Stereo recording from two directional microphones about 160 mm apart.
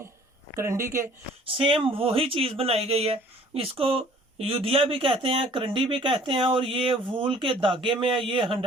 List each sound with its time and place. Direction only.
0.5 s speech: 15° right (ahead or behind)
1.5 s speech: 35° right (ahead or behind)